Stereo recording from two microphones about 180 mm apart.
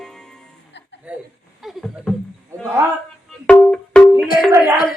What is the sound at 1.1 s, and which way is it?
Speech, 5° right (ahead or behind).